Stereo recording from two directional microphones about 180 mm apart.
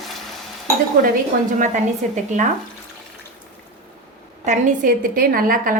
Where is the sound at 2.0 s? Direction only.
45° right (ahead or behind).